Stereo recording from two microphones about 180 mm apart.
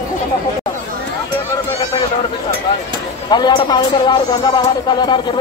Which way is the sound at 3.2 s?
25° left (ahead or behind).